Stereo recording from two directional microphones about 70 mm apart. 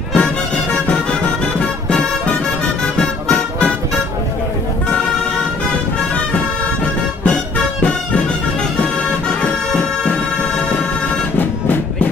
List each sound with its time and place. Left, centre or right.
0.1 s music: centre
6.8 s music: centre
9.4 s music: centre